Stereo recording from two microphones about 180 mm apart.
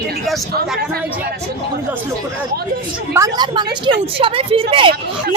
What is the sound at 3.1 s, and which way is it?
A woman's voice, 20° right (ahead or behind).